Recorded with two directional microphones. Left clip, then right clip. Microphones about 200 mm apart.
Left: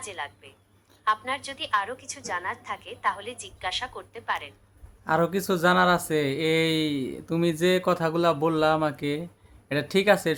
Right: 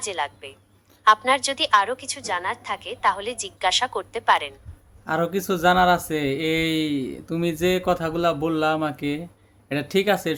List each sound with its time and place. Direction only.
0.0 s a woman's voice: 40° right (ahead or behind)
5.0 s speech: 10° left (ahead or behind)